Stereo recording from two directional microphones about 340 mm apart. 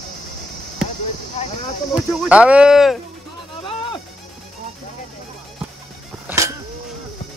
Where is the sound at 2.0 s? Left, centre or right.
Centre.